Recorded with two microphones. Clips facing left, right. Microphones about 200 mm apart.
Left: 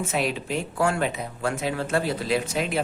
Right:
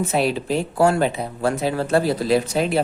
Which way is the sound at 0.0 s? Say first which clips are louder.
Right 6 dB; 35° right (ahead or behind).